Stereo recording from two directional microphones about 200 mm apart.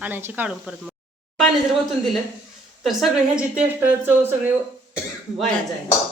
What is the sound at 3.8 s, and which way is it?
Speech, 10° right (ahead or behind).